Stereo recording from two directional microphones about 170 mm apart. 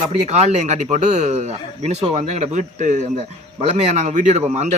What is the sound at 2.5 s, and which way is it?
Speech, 45° right (ahead or behind).